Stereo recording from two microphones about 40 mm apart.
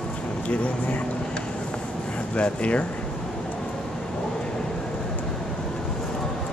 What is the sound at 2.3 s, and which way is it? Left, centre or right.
Speech, left.